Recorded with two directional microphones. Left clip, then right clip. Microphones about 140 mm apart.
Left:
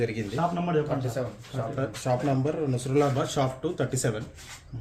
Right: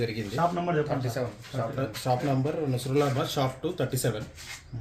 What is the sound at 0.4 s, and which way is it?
Speech, 75° right (ahead or behind).